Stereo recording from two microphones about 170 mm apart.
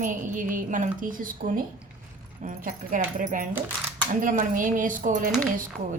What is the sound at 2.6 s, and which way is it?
A woman's voice, 50° right (ahead or behind).